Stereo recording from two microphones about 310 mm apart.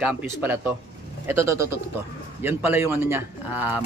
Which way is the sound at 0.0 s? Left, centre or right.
Centre.